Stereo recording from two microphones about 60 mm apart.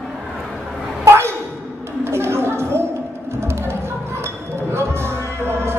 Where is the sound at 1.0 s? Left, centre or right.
Right.